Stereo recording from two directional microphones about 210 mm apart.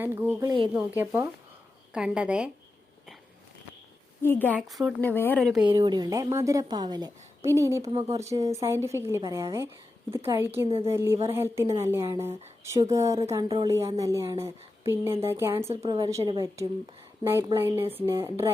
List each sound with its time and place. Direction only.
0.0 s a woman's voice: 10° right (ahead or behind)
4.2 s a woman's voice: 10° left (ahead or behind)
5.6 s a woman's voice: 20° right (ahead or behind)
10.7 s a woman's voice: 25° right (ahead or behind)
10.9 s a woman's voice: 10° right (ahead or behind)
15.7 s a woman's voice: 30° right (ahead or behind)
16.0 s a woman's voice: 15° right (ahead or behind)